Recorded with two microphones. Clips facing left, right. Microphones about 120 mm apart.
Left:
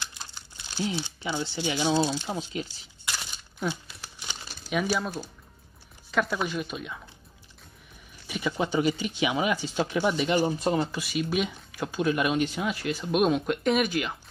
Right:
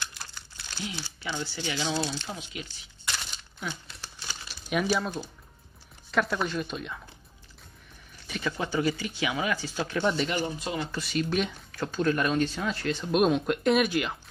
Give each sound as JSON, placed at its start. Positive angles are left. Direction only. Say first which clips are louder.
{"t": 0.2, "sound": "crumpling", "louder": "even", "side_deg": 20}
{"t": 1.0, "sound": "speech", "louder": "left 3 dB", "side_deg": 20}
{"t": 3.1, "sound": "a sound", "louder": "even", "side_deg": 5}
{"t": 4.6, "sound": "speech", "louder": "even", "side_deg": 0}
{"t": 8.3, "sound": "speech", "louder": "left 3 dB", "side_deg": 15}
{"t": 10.4, "sound": "speech", "louder": "left 6 dB", "side_deg": 40}
{"t": 10.9, "sound": "speech", "louder": "even", "side_deg": 10}